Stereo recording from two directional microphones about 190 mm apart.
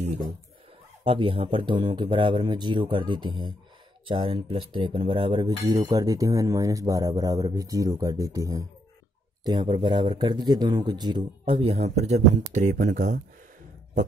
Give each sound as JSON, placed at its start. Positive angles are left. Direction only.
{"t": 1.0, "sound": "speech", "side_deg": -30}